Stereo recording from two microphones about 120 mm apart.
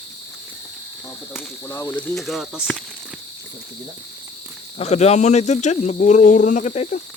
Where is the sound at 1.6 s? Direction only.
25° left (ahead or behind).